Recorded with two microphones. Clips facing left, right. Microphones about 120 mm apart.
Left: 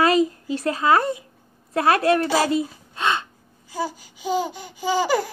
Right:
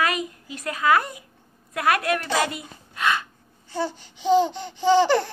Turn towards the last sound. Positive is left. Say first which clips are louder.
# right 3 dB
turn(degrees=10)  # may be behind; listen again after turning